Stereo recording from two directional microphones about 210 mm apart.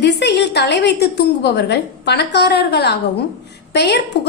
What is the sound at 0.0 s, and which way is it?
A woman's voice, 55° left (ahead or behind).